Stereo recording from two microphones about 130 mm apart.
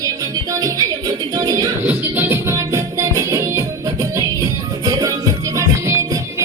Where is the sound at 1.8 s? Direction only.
15° right (ahead or behind).